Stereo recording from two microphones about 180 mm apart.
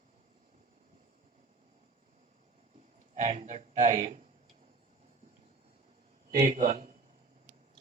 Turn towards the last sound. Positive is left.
turn(degrees=-40)  # may be behind; listen again after turning